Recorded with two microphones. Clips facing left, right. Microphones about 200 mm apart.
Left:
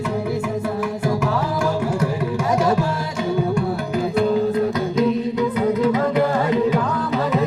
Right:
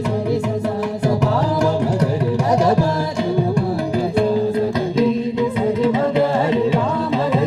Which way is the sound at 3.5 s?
30° right (ahead or behind).